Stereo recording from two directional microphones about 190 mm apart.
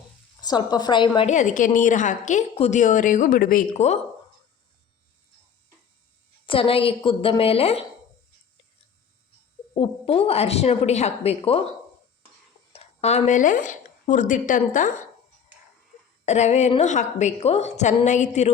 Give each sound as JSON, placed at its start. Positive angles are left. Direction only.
{"t": 0.4, "sound": "a woman's voice", "side_deg": 20}
{"t": 1.3, "sound": "a woman's voice", "side_deg": 40}
{"t": 6.4, "sound": "a woman's voice", "side_deg": 30}
{"t": 9.7, "sound": "a woman's voice", "side_deg": 30}
{"t": 12.7, "sound": "speech", "side_deg": 35}
{"t": 16.2, "sound": "a woman's voice", "side_deg": 35}